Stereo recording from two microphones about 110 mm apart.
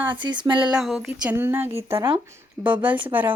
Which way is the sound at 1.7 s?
60° right (ahead or behind).